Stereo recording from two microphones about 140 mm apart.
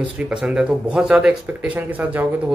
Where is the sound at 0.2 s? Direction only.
10° right (ahead or behind).